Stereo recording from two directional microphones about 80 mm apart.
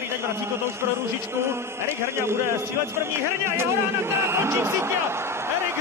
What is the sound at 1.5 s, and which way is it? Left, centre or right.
A man's voice, right.